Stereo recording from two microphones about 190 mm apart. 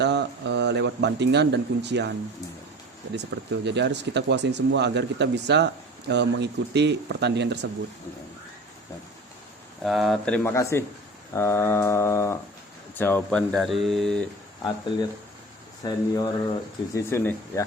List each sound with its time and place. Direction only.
0.0 s speech: 65° right (ahead or behind)
3.2 s speech: 65° right (ahead or behind)
9.8 s speech: centre (ahead or behind)
11.3 s a sound: 10° left (ahead or behind)
13.0 s speech: 10° left (ahead or behind)
15.8 s speech: 20° left (ahead or behind)
16.9 s a sound: 15° left (ahead or behind)